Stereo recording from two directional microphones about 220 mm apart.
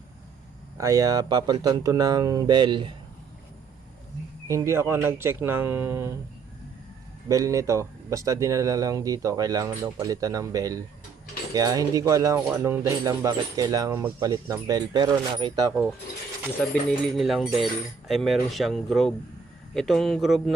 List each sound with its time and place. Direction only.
0.8 s speech: 15° right (ahead or behind)
4.4 s speech: 15° right (ahead or behind)
7.3 s speech: 15° right (ahead or behind)
16.6 s speech: 5° left (ahead or behind)